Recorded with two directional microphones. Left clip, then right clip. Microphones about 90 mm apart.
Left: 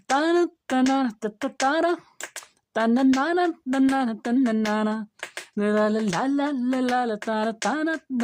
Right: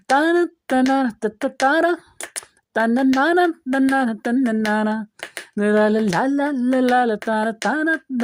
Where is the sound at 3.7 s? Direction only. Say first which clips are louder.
Right 4 dB; 30° right (ahead or behind).